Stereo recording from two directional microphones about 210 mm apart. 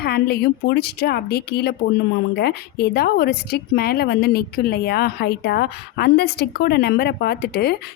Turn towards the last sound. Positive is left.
turn(degrees=50)  # may be behind; listen again after turning